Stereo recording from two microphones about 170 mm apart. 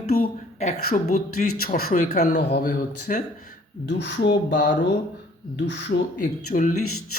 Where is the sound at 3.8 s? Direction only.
90° left.